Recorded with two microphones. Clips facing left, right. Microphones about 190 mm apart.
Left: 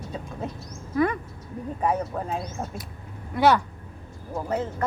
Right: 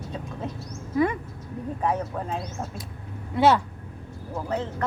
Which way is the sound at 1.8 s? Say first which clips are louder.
Left 2 dB; 5° left (ahead or behind).